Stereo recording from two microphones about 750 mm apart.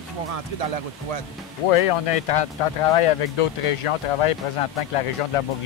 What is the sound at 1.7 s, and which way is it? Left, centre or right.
Speech, left.